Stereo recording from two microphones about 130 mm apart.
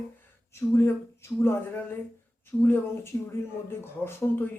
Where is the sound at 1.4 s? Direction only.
15° left (ahead or behind).